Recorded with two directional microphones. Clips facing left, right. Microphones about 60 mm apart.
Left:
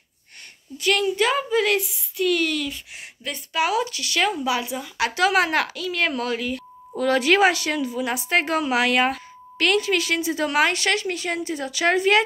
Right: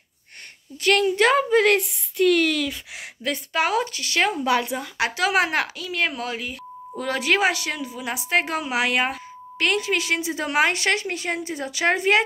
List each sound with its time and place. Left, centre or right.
0.7 s a woman's voice: right
3.5 s speech: right
4.5 s speech: right
5.3 s a woman's voice: centre